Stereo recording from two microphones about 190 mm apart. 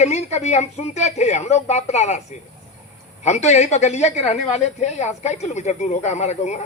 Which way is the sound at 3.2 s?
35° left (ahead or behind).